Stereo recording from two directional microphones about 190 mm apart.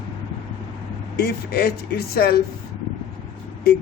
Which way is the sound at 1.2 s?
55° left (ahead or behind).